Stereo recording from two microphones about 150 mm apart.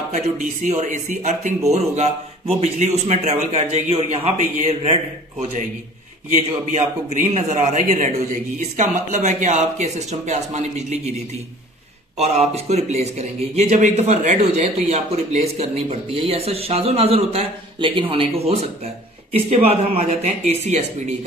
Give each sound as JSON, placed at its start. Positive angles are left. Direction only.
{"t": 0.1, "sound": "speech", "side_deg": -55}
{"t": 6.3, "sound": "speech", "side_deg": -55}
{"t": 12.2, "sound": "speech", "side_deg": -45}